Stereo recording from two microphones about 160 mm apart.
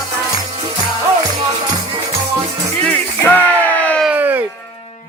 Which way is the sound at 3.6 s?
10° left (ahead or behind).